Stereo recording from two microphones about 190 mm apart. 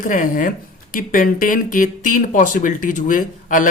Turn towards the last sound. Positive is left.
turn(degrees=45)  # may be behind; listen again after turning